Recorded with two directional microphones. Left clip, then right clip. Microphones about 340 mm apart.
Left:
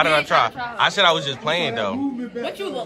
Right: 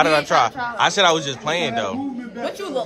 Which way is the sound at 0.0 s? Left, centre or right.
Centre.